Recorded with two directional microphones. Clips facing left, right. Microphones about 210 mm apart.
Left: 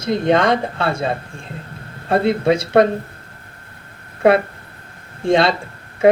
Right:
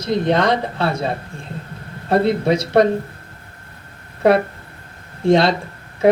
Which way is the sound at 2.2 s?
55° left (ahead or behind).